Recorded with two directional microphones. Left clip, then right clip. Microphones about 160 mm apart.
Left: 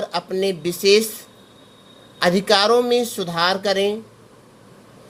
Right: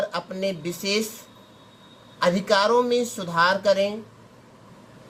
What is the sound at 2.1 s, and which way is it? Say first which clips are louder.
Speech: left 4 dB; 35° left (ahead or behind).